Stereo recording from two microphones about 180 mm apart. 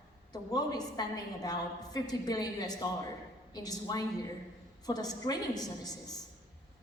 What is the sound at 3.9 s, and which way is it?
A woman's voice, 20° left (ahead or behind).